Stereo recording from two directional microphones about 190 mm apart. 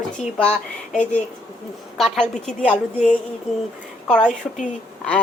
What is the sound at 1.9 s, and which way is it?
Speech, centre (ahead or behind).